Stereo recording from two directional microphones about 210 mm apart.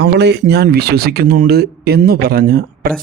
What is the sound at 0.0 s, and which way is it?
Speech, 55° right (ahead or behind).